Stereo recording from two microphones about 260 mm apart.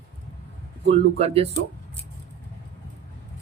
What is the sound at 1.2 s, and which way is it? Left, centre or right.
Speech, right.